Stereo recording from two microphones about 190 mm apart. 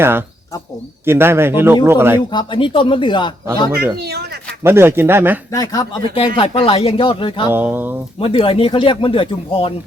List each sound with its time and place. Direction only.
0.0 s a man's voice: 10° right (ahead or behind)
2.3 s speech: 25° left (ahead or behind)
4.0 s speech: 60° right (ahead or behind)
4.6 s a man's voice: 10° right (ahead or behind)
5.5 s speech: 20° left (ahead or behind)
6.1 s speech: 30° left (ahead or behind)
7.5 s a man's voice: 10° right (ahead or behind)
8.2 s speech: 30° left (ahead or behind)